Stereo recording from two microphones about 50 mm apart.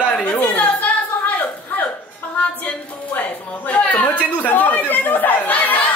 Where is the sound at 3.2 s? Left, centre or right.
Left.